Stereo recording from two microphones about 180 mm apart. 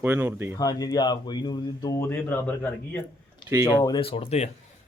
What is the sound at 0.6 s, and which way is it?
A man's voice, 20° left (ahead or behind).